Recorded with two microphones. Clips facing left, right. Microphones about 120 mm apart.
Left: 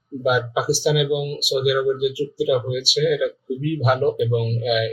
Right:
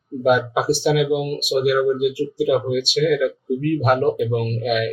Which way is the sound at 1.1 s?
45° right (ahead or behind).